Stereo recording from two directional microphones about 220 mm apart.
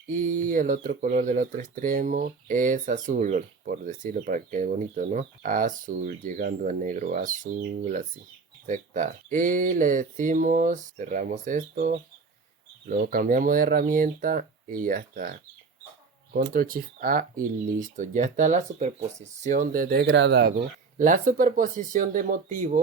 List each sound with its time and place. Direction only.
0.1 s speech: 35° right (ahead or behind); by 20.5 s 50° right (ahead or behind)
21.0 s speech: 35° right (ahead or behind)